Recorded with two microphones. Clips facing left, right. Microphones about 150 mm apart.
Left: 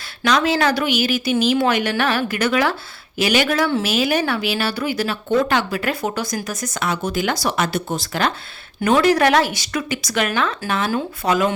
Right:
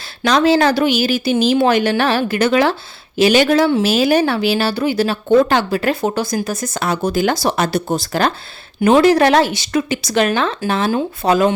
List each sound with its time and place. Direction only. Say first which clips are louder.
0.3 s speech: right 5 dB; 35° right (ahead or behind)